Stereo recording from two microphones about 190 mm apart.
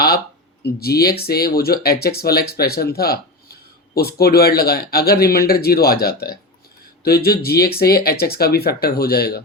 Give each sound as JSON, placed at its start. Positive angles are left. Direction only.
{"t": 0.6, "sound": "speech", "side_deg": 55}